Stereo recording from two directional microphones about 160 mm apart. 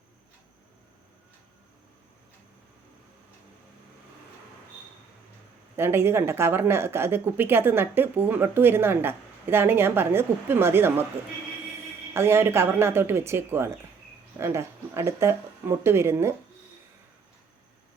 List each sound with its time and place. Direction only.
5.7 s speech: 15° right (ahead or behind)
12.1 s speech: 15° right (ahead or behind)